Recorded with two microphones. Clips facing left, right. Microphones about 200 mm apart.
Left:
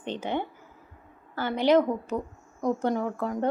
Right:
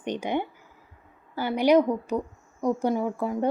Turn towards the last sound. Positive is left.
turn(degrees=-10)  # may be behind; listen again after turning